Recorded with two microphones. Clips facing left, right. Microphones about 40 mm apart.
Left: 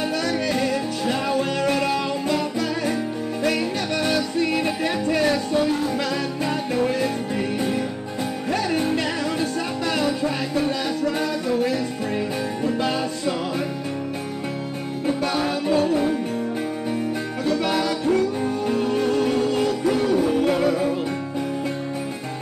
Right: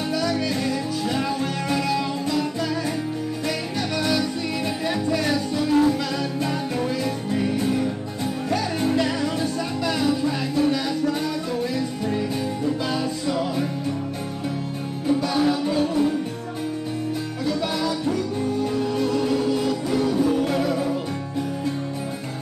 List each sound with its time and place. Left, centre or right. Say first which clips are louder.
0.1 s music: left 1 dB; left
8.5 s music: left 1 dB; left
17.5 s music: left 3 dB; left